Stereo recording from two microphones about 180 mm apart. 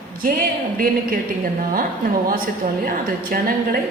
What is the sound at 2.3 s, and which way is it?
A woman's voice, 55° right (ahead or behind).